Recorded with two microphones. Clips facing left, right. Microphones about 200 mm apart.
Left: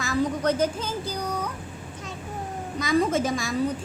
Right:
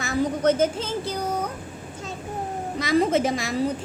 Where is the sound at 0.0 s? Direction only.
25° right (ahead or behind).